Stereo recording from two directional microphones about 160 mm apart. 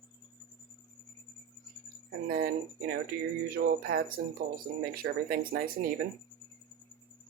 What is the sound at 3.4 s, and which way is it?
Speech, 70° right (ahead or behind).